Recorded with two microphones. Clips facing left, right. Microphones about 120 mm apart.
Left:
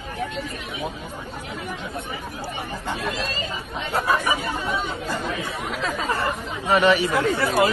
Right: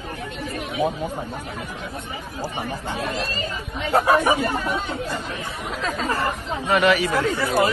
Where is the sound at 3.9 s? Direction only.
50° right (ahead or behind).